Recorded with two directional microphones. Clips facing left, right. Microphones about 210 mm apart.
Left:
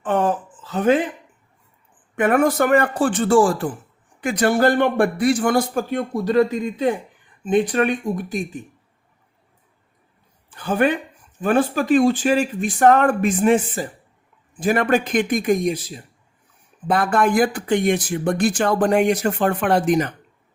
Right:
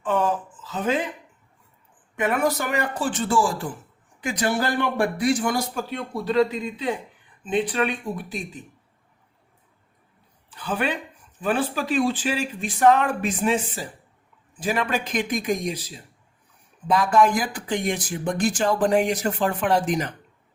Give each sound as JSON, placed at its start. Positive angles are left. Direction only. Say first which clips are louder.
{"t": 0.0, "sound": "a sound", "louder": "left 3 dB", "side_deg": 50}
{"t": 2.1, "sound": "speech", "louder": "left 6 dB", "side_deg": 50}
{"t": 10.5, "sound": "speech", "louder": "left 7 dB", "side_deg": 50}
{"t": 16.8, "sound": "speech", "louder": "even", "side_deg": 55}